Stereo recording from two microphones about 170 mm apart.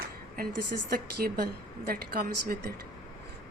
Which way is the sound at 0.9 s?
65° right (ahead or behind).